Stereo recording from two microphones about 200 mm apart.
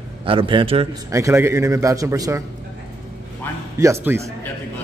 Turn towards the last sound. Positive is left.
turn(degrees=-10)  # may be behind; listen again after turning